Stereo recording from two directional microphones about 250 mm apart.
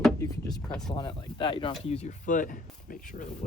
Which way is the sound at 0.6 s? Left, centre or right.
Centre.